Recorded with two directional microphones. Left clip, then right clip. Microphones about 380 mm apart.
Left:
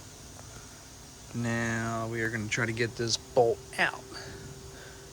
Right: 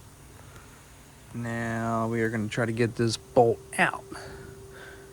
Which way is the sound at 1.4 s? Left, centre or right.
Centre.